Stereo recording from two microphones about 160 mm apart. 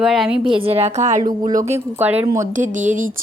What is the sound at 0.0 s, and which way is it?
Speech, 5° right (ahead or behind).